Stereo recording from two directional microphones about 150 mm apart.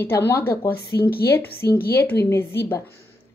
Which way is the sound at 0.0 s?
15° left (ahead or behind).